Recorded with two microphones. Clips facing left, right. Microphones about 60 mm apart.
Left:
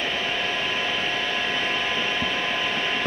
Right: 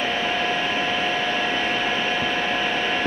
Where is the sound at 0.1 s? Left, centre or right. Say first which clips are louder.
Right 3 dB; right.